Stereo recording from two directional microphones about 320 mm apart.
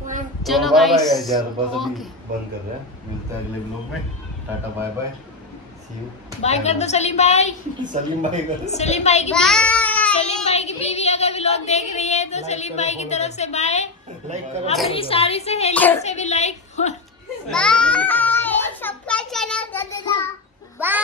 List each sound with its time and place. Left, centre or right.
0.4 s speech: centre
6.4 s a woman's voice: centre
7.8 s speech: right
8.6 s a woman's voice: left
9.3 s child singing: centre
10.2 s a sound: centre
14.3 s speech: right
15.0 s a woman's voice: centre
15.7 s speech: centre
16.0 s a woman's voice: left
17.5 s a sound: centre
20.8 s a child's voice: centre